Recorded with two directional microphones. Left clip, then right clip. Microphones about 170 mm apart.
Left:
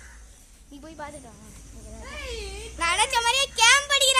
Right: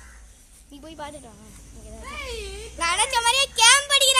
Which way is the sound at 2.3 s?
50° right (ahead or behind).